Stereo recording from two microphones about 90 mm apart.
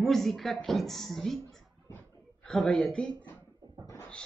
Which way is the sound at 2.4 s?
5° left (ahead or behind).